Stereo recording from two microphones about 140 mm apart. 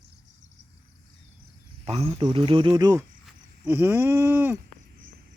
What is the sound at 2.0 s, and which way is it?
Speech, 35° right (ahead or behind).